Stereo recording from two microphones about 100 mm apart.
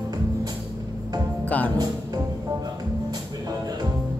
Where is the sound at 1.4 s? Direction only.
15° left (ahead or behind).